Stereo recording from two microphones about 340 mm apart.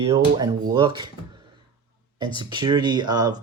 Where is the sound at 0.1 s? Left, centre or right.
Centre.